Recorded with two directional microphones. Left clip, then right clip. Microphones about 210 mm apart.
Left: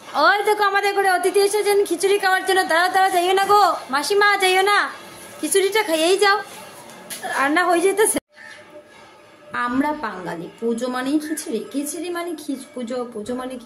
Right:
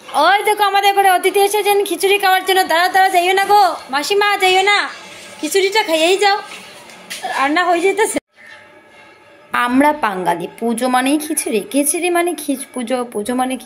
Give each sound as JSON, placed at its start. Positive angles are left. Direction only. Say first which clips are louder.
{"t": 0.1, "sound": "a woman's voice", "louder": "right 4 dB", "side_deg": -5}
{"t": 9.5, "sound": "a woman's voice", "louder": "right 8 dB", "side_deg": -30}